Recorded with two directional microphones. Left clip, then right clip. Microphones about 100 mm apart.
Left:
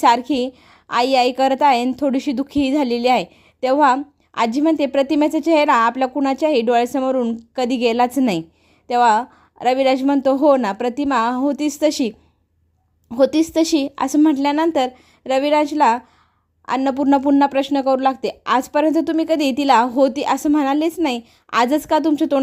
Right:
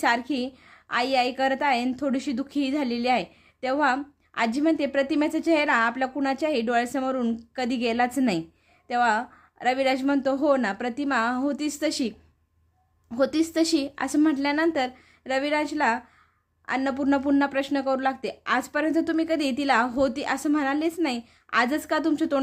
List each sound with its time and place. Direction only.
0.0 s a woman's voice: 60° left (ahead or behind)
1.9 s a woman's voice: 50° left (ahead or behind)
6.1 s speech: 50° left (ahead or behind)
7.5 s a woman's voice: 55° left (ahead or behind)
19.9 s a woman's voice: 45° left (ahead or behind)